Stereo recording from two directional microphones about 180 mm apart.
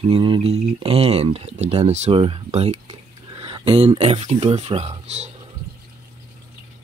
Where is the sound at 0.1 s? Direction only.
30° right (ahead or behind).